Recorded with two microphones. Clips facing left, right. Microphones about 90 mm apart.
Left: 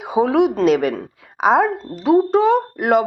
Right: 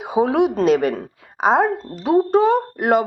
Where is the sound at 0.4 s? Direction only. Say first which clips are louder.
Left 1 dB; centre (ahead or behind).